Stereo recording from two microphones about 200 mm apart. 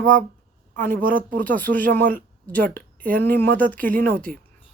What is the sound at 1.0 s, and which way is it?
Speech, 45° right (ahead or behind).